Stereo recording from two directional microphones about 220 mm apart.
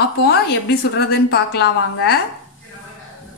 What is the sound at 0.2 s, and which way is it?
A woman's voice, 45° left (ahead or behind).